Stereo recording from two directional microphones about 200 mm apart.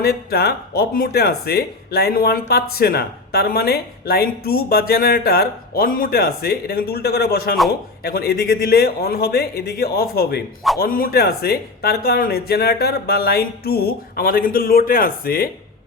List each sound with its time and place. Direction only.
0.0 s speech: 50° left (ahead or behind)